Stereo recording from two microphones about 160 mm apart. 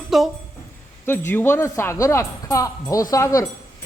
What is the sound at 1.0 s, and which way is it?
Speech, 15° left (ahead or behind).